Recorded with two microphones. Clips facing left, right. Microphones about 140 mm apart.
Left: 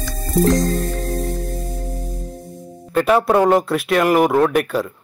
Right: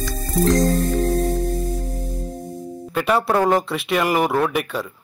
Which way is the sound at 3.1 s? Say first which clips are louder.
Left 3 dB; 20° left (ahead or behind).